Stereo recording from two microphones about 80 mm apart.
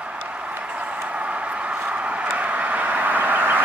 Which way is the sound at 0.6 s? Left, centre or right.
Centre.